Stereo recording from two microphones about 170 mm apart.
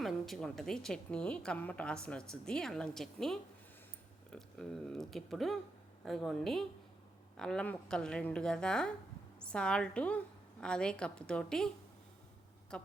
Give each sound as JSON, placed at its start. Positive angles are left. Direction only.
{"t": 0.0, "sound": "a woman's voice", "side_deg": 0}
{"t": 12.7, "sound": "a woman's voice", "side_deg": 5}